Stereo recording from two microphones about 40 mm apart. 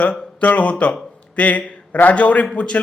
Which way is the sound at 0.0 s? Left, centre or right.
Left.